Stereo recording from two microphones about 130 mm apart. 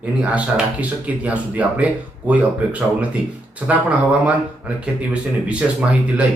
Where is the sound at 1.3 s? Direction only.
10° right (ahead or behind).